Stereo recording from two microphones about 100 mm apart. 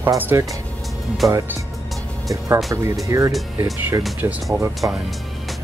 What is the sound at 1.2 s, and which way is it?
Speech, centre (ahead or behind).